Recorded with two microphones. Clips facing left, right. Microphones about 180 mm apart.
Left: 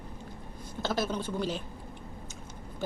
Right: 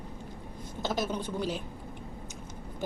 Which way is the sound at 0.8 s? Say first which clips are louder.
Left 1 dB; 15° right (ahead or behind).